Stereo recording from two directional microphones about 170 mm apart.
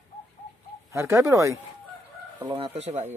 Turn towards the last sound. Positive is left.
turn(degrees=-40)  # may be behind; listen again after turning